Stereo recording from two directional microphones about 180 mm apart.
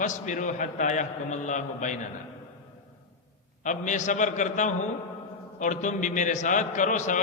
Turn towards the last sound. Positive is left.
turn(degrees=45)  # may be behind; listen again after turning